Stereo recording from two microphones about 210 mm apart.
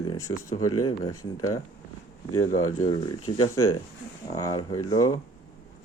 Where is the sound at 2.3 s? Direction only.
90° left.